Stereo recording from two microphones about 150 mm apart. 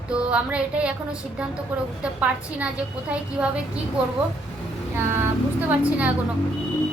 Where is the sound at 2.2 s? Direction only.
10° right (ahead or behind).